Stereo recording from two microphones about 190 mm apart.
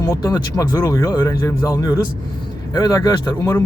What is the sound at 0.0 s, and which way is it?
Speech, 20° left (ahead or behind).